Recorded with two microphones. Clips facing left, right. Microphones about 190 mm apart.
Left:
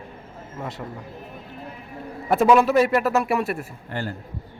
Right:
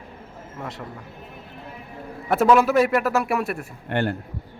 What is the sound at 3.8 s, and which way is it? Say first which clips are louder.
Speech: right 7 dB; 65° right (ahead or behind).